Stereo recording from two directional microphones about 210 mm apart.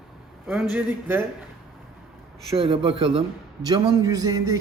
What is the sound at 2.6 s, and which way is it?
A man's voice, 25° right (ahead or behind).